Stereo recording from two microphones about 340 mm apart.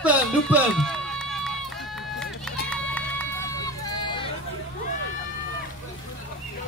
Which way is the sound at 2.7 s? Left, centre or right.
Centre.